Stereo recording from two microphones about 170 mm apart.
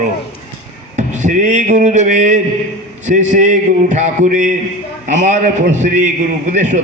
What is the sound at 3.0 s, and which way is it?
A man's voice, 45° right (ahead or behind).